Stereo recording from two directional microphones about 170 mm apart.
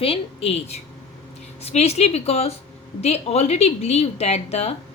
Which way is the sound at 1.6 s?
40° left (ahead or behind).